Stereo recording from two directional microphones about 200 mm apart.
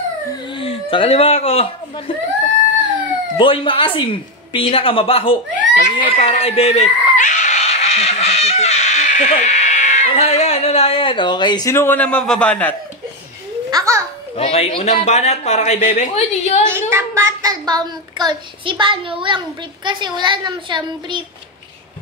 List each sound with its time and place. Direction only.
0.6 s a woman's voice: 25° left (ahead or behind)
3.3 s a woman's voice: 25° left (ahead or behind)
5.6 s a sound: 40° left (ahead or behind)
6.2 s speech: 30° left (ahead or behind); by 12.7 s 5° left (ahead or behind)
13.7 s a child's voice: 15° right (ahead or behind)
14.3 s a man's voice: 30° left (ahead or behind)
16.7 s a child's voice: 15° right (ahead or behind)